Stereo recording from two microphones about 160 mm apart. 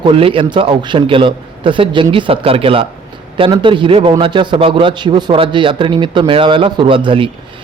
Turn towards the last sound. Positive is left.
turn(degrees=-35)  # may be behind; listen again after turning